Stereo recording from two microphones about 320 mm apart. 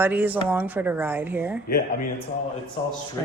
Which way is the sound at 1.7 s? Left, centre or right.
Left.